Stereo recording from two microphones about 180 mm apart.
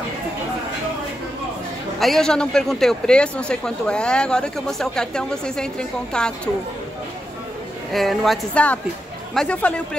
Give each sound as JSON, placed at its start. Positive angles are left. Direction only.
{"t": 2.0, "sound": "a man's voice", "side_deg": 0}
{"t": 7.9, "sound": "a man's voice", "side_deg": 0}